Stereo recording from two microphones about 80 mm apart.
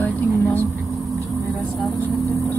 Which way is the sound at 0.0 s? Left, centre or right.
Left.